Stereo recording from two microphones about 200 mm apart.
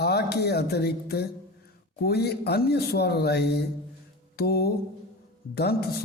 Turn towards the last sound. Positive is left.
turn(degrees=50)  # may be behind; listen again after turning